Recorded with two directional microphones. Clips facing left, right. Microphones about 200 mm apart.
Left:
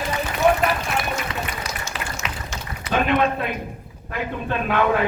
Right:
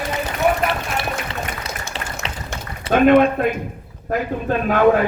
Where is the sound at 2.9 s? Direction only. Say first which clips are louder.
Right 8 dB; 50° right (ahead or behind).